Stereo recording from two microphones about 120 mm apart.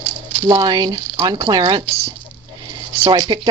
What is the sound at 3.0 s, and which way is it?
Speech, 35° right (ahead or behind).